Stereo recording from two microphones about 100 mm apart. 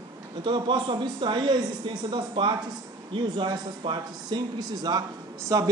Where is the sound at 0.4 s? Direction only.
50° right (ahead or behind).